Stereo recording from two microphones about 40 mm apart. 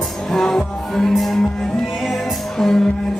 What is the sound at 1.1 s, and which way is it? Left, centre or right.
Music, centre.